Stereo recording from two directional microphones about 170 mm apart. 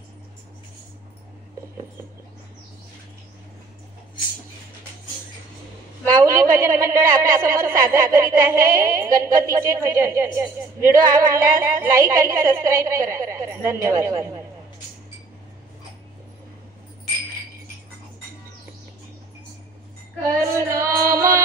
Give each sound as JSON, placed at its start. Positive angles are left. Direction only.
{"t": 6.0, "sound": "a woman's voice", "side_deg": -20}
{"t": 20.2, "sound": "female singing", "side_deg": -15}